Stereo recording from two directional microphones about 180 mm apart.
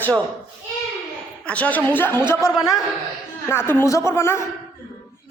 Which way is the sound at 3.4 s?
10° left (ahead or behind).